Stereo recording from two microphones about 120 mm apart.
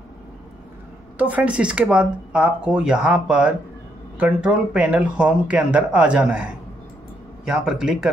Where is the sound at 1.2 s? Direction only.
10° right (ahead or behind).